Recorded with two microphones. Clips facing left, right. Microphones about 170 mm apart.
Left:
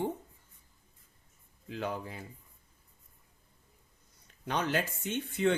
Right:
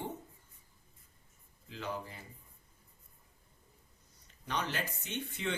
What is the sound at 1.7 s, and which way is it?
Speech, 55° left (ahead or behind).